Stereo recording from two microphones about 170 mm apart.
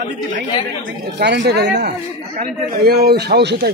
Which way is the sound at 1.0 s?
75° right (ahead or behind).